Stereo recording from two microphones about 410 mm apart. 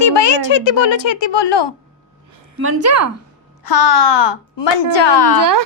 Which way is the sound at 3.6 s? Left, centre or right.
Left.